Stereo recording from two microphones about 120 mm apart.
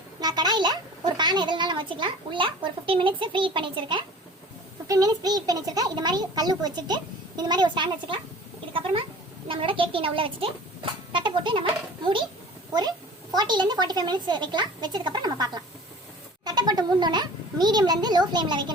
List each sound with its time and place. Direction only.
0.2 s a child's voice: 35° right (ahead or behind)
4.9 s a child's voice: 30° right (ahead or behind)
13.3 s a child's voice: 35° right (ahead or behind)